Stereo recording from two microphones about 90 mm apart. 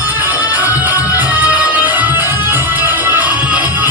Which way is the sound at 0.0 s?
20° right (ahead or behind).